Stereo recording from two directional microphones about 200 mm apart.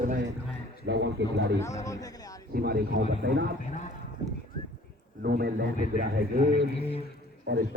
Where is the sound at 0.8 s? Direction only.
60° right (ahead or behind).